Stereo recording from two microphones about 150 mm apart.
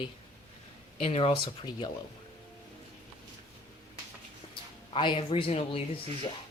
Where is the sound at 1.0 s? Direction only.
40° left (ahead or behind).